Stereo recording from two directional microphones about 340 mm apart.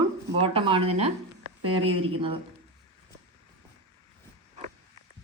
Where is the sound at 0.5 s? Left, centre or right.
Centre.